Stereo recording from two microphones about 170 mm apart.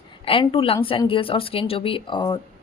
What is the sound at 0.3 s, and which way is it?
A woman's voice, 30° left (ahead or behind).